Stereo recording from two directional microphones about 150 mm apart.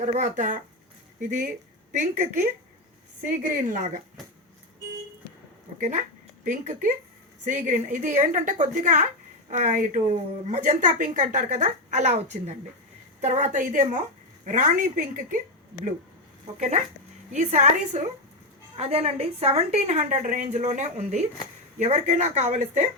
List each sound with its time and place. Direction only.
0.0 s a woman's voice: 55° right (ahead or behind)
1.9 s a woman's voice: 50° right (ahead or behind)
3.7 s a woman's voice: 55° right (ahead or behind)
5.8 s a woman's voice: 55° right (ahead or behind)
16.6 s a woman's voice: 50° right (ahead or behind)